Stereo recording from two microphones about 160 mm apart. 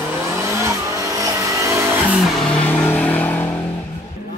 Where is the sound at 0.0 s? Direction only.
15° right (ahead or behind).